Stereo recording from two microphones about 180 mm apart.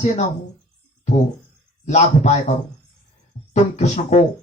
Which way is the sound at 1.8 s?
40° left (ahead or behind).